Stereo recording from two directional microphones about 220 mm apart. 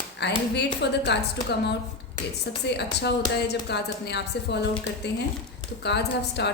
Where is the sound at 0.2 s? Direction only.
50° left (ahead or behind).